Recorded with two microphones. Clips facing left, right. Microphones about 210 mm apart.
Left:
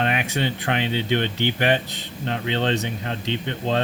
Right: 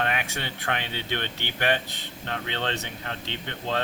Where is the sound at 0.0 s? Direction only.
20° left (ahead or behind).